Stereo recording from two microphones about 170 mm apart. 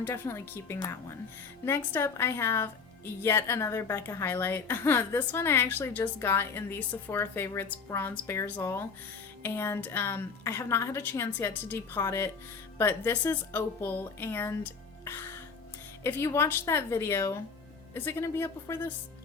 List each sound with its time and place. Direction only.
0.0 s a woman's voice: 15° left (ahead or behind)